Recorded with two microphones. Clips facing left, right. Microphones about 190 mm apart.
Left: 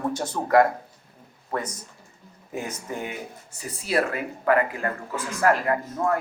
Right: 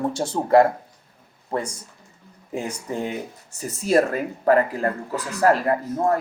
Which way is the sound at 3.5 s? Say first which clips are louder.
Right 6 dB; 45° right (ahead or behind).